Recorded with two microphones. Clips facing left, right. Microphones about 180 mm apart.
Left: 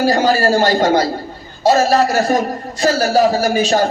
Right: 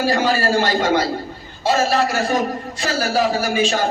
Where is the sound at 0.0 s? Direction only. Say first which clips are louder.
Left 4 dB; 40° left (ahead or behind).